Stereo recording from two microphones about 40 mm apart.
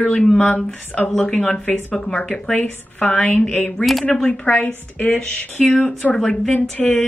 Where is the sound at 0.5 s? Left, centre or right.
Centre; by 4.6 s left.